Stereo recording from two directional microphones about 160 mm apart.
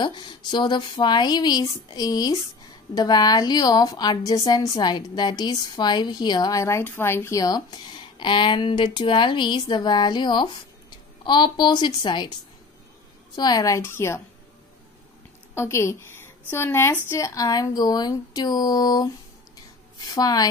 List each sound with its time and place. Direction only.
0.0 s a woman's voice: 30° left (ahead or behind)
13.4 s a woman's voice: 25° left (ahead or behind)
15.5 s a woman's voice: 15° left (ahead or behind)
20.1 s a woman's voice: 25° left (ahead or behind)